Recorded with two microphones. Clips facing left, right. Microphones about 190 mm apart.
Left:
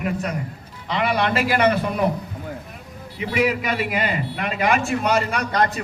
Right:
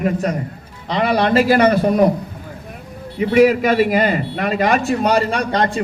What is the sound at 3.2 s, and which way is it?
A man's voice, 45° right (ahead or behind).